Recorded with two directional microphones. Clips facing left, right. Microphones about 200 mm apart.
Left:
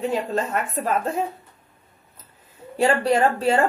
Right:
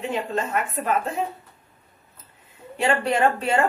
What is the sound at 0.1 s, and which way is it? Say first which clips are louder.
Speech: left 2 dB; 35° left (ahead or behind).